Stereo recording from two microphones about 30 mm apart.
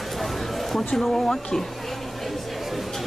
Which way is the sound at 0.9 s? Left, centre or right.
Centre.